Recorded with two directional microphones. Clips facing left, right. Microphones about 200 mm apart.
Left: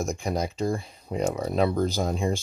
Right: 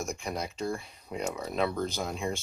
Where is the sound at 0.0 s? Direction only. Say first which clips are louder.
Left 6 dB; 35° left (ahead or behind).